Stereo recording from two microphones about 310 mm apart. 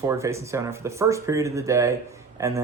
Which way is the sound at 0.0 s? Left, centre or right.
Centre.